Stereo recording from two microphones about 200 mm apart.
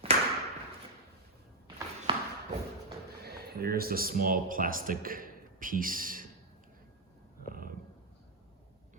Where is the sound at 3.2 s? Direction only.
50° right (ahead or behind).